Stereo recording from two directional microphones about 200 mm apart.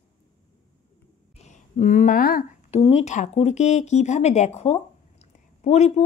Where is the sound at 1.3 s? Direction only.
35° left (ahead or behind).